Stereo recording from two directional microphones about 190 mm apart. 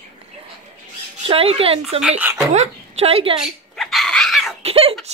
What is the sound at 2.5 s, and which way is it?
Speech, 35° right (ahead or behind).